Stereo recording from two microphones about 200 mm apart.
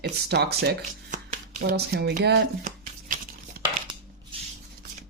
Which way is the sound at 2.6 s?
45° right (ahead or behind).